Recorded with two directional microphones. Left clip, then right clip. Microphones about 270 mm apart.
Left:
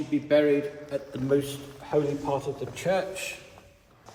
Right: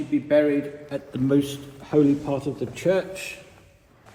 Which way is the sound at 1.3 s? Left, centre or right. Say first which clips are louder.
Right 2 dB; right.